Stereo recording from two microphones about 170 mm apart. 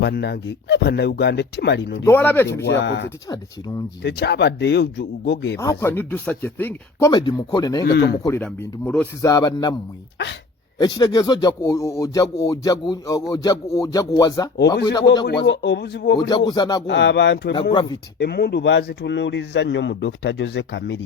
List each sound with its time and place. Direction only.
0.0 s speech: 75° left (ahead or behind)
2.0 s speech: 10° left (ahead or behind)
2.6 s a man's voice: 90° left
5.5 s speech: 15° left (ahead or behind)
7.1 s speech: 25° left (ahead or behind)
7.9 s speech: 75° left (ahead or behind)
8.4 s speech: 10° left (ahead or behind)
9.2 s speech: 20° left (ahead or behind)
10.8 s speech: 25° left (ahead or behind)
15.4 s speech: 80° left
16.5 s speech: 25° left (ahead or behind)
16.8 s a man's voice: 90° left
17.5 s speech: 30° left (ahead or behind)
18.2 s a man's voice: 70° left (ahead or behind); by 21.0 s 90° left